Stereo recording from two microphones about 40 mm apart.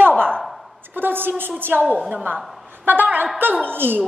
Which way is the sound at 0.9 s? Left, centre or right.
Right.